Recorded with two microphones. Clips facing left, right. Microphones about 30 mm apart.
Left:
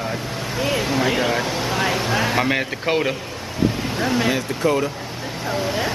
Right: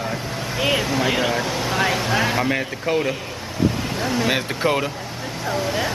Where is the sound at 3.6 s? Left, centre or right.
Centre.